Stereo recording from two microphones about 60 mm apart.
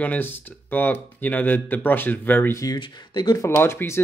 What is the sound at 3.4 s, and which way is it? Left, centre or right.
Speech, left.